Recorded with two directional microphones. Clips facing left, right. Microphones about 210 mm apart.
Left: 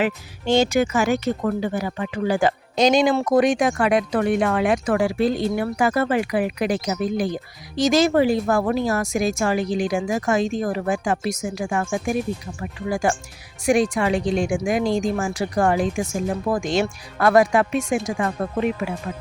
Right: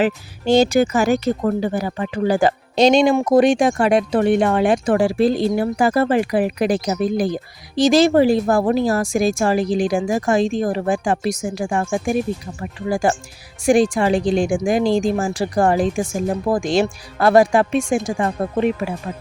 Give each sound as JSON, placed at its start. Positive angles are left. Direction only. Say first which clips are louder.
{"t": 0.0, "sound": "speech", "louder": "right 4 dB", "side_deg": -35}